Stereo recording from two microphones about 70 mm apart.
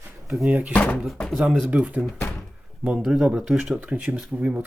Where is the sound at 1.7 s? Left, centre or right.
Centre.